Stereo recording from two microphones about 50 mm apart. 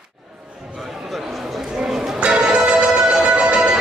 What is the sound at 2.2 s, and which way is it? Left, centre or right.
Music, centre.